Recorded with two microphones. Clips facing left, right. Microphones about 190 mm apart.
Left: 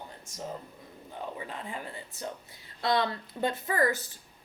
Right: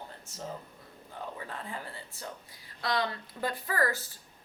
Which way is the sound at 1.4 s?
15° left (ahead or behind).